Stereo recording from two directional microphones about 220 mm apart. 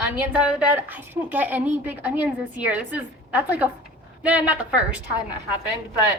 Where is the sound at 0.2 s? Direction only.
5° right (ahead or behind).